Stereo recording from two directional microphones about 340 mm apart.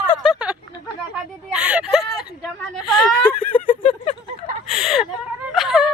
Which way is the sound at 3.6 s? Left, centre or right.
Left.